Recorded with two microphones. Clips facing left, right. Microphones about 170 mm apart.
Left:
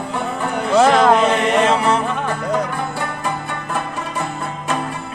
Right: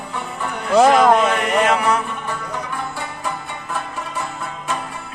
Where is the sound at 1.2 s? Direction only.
30° left (ahead or behind).